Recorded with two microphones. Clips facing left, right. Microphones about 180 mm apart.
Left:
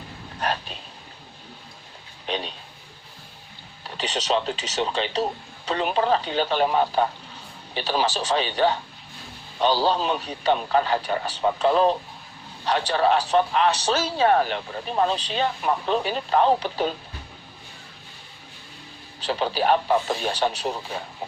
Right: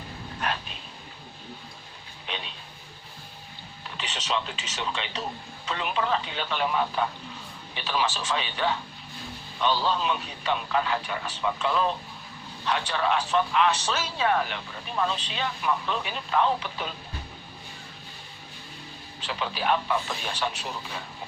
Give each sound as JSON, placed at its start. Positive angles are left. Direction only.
{"t": 2.2, "sound": "a sound", "side_deg": 40}
{"t": 3.9, "sound": "a man's voice", "side_deg": 35}
{"t": 19.2, "sound": "a man's voice", "side_deg": 35}